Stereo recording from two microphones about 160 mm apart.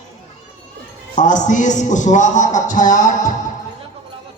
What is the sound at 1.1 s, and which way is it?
A man's voice, 50° left (ahead or behind).